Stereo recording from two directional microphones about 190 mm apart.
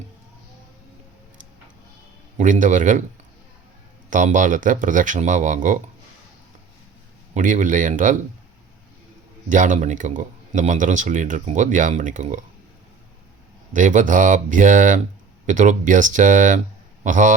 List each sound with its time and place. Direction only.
2.4 s speech: 40° right (ahead or behind)
4.1 s speech: 40° right (ahead or behind)
7.3 s speech: 40° right (ahead or behind)
9.5 s speech: 40° right (ahead or behind)
13.7 s a man's voice: 45° right (ahead or behind)